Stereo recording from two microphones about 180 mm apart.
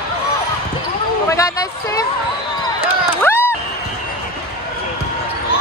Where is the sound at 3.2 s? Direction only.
10° left (ahead or behind).